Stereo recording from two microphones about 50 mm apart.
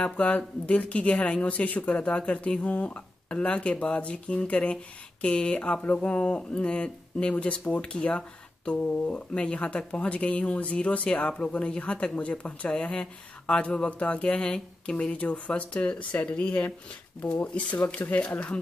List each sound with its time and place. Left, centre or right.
0.0 s speech: left
17.7 s speech: left